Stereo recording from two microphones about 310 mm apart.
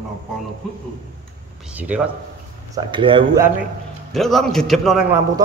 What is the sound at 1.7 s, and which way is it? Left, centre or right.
Speech, centre.